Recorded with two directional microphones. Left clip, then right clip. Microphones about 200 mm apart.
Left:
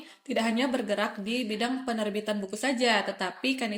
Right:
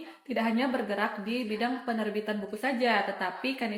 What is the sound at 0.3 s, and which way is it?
A woman's voice, 50° left (ahead or behind).